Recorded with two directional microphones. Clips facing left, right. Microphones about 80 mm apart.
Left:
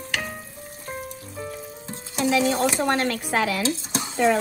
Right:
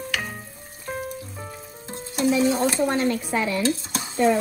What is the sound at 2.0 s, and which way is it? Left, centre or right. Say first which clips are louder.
Speech: right 1 dB; left.